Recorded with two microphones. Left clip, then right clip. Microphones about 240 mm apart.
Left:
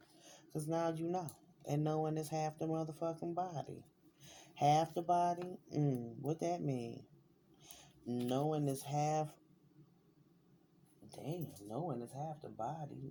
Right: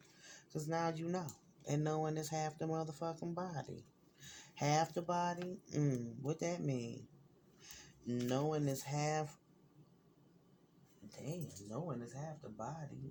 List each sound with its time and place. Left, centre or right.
0.2 s speech: right
7.6 s a sound: right
8.3 s speech: right
11.7 s speech: centre